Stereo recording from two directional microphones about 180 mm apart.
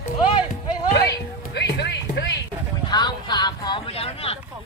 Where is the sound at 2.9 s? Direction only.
25° left (ahead or behind).